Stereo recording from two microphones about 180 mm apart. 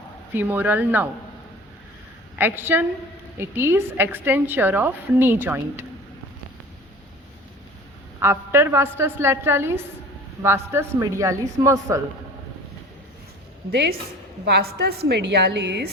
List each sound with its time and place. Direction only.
0.3 s a woman's voice: 10° right (ahead or behind)
2.4 s a woman's voice: 10° right (ahead or behind)
8.2 s a woman's voice: 15° right (ahead or behind)
13.7 s a woman's voice: 65° right (ahead or behind)